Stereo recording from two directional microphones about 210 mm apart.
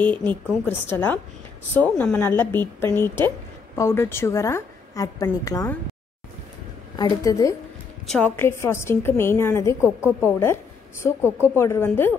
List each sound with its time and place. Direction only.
0.0 s a woman's voice: 10° left (ahead or behind)
7.0 s a woman's voice: 20° left (ahead or behind)